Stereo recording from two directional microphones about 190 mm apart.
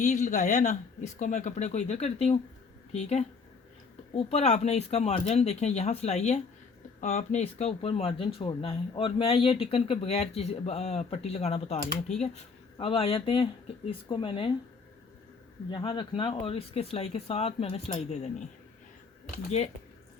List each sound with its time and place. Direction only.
0.0 s speech: 40° left (ahead or behind)
15.7 s speech: 25° left (ahead or behind)